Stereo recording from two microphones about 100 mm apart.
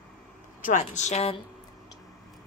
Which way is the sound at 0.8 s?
90° left.